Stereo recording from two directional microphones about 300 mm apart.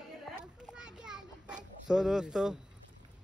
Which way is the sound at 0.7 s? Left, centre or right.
Centre.